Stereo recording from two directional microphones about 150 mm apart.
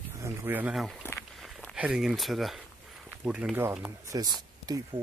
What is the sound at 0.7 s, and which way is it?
Speech, centre (ahead or behind).